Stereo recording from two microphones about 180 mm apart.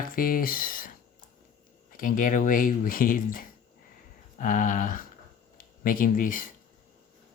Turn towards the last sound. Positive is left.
turn(degrees=50)  # may be behind; listen again after turning